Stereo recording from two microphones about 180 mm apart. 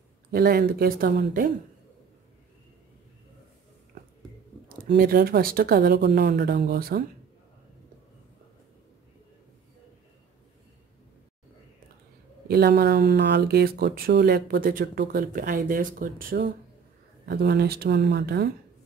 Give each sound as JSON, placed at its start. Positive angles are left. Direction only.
{"t": 0.3, "sound": "speech", "side_deg": -55}
{"t": 4.9, "sound": "speech", "side_deg": -55}
{"t": 6.6, "sound": "speech", "side_deg": -55}
{"t": 12.4, "sound": "speech", "side_deg": -60}
{"t": 17.3, "sound": "speech", "side_deg": -65}